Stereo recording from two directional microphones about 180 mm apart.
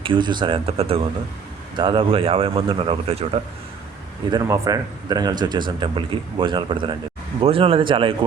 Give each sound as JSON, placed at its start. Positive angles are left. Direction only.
{"t": 0.0, "sound": "speech", "side_deg": -25}
{"t": 4.3, "sound": "speech", "side_deg": -20}